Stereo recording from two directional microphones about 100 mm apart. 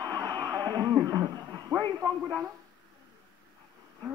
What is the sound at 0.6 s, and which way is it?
Speech, 45° right (ahead or behind).